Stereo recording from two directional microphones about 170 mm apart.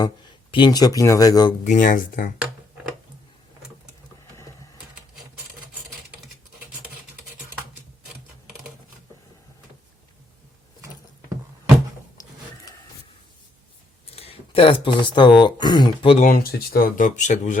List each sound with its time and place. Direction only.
0.5 s speech: 25° left (ahead or behind)
1.6 s speech: 50° left (ahead or behind)
12.2 s printer: 20° left (ahead or behind)
14.1 s speech: 35° left (ahead or behind)
16.1 s speech: 50° left (ahead or behind)